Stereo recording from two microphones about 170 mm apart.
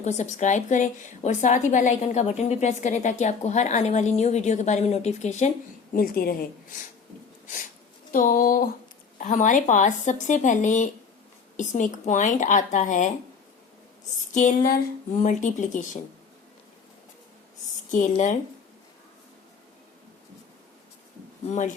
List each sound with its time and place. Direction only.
0.0 s a woman's voice: 45° left (ahead or behind)
5.9 s a woman's voice: 60° left (ahead or behind)
8.1 s a woman's voice: 55° left (ahead or behind)
14.3 s a woman's voice: 55° left (ahead or behind)
17.9 s a woman's voice: 50° left (ahead or behind)